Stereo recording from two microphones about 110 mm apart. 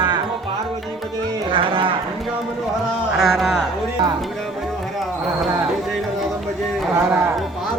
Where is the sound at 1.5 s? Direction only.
55° right (ahead or behind).